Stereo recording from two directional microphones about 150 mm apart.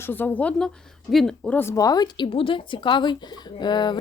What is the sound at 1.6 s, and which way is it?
Speech, 20° left (ahead or behind).